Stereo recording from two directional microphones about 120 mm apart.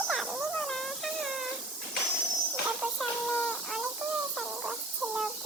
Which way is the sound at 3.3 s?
10° left (ahead or behind).